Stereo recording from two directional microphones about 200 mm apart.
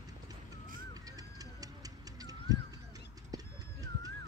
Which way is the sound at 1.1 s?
20° right (ahead or behind).